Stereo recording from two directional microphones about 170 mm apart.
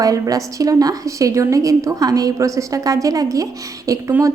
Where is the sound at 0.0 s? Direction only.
20° right (ahead or behind).